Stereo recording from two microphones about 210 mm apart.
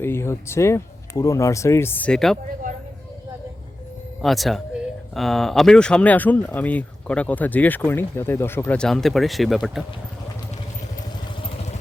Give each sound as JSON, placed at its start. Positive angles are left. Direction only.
{"t": 0.0, "sound": "speech", "side_deg": 10}
{"t": 4.2, "sound": "speech", "side_deg": 0}
{"t": 11.4, "sound": "vehicle", "side_deg": 25}